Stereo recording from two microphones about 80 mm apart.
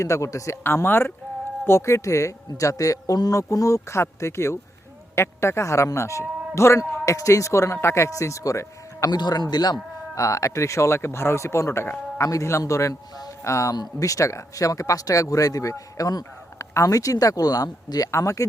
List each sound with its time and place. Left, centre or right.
0.0 s speech: left
0.6 s speech: left
9.0 s speech: left
10.2 s speech: left
18.1 s speech: left